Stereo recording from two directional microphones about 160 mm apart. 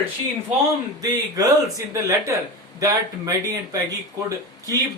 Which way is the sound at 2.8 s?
20° right (ahead or behind).